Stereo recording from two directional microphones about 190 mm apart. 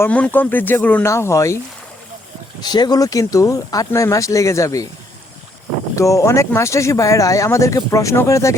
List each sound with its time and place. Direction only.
0.0 s speech: 10° left (ahead or behind)
2.6 s speech: 20° left (ahead or behind)
6.0 s speech: 15° left (ahead or behind)